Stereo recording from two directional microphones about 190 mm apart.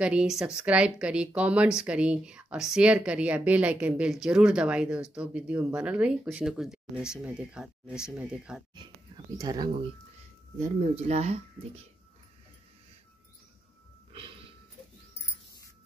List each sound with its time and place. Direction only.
0.0 s speech: 5° right (ahead or behind)
8.7 s speech: 20° right (ahead or behind)
11.1 s speech: 35° right (ahead or behind)
14.1 s a sound: 30° right (ahead or behind)